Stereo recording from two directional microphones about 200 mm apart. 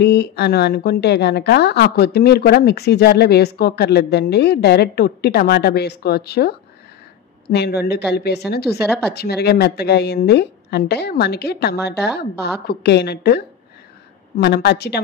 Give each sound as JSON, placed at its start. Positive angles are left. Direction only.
{"t": 0.0, "sound": "a woman's voice", "side_deg": 55}
{"t": 7.5, "sound": "a woman's voice", "side_deg": 55}